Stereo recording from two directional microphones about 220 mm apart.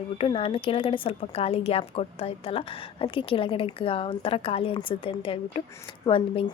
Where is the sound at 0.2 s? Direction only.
25° left (ahead or behind).